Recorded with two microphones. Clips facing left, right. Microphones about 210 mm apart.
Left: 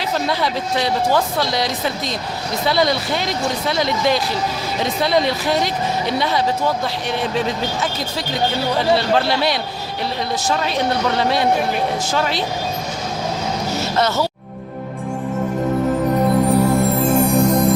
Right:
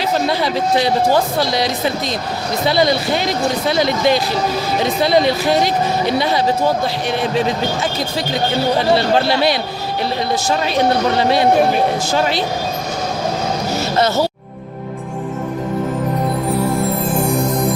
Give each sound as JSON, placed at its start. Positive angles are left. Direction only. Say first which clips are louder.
{"t": 4.8, "sound": "speech", "louder": "right 3 dB", "side_deg": -30}